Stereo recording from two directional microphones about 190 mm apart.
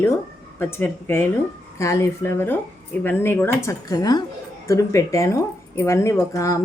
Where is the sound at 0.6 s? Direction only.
10° left (ahead or behind).